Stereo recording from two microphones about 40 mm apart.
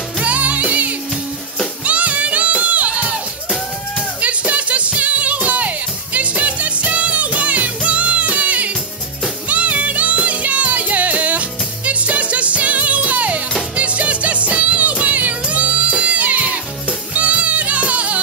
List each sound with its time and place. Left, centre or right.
0.2 s music: right
4.2 s music: right